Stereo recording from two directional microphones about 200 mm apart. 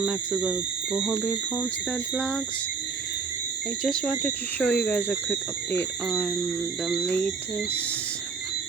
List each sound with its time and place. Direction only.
0.0 s speech: 5° right (ahead or behind)
3.8 s speech: 5° left (ahead or behind)